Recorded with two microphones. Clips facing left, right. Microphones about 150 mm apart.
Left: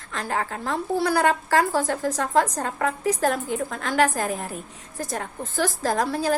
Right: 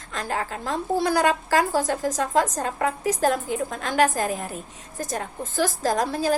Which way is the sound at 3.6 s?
25° right (ahead or behind).